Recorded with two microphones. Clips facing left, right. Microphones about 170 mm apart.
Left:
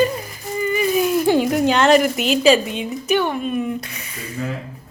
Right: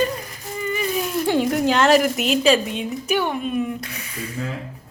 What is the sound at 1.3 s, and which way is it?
Speech, centre (ahead or behind).